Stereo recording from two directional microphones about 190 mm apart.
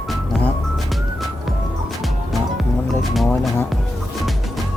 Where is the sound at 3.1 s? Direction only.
Centre (ahead or behind).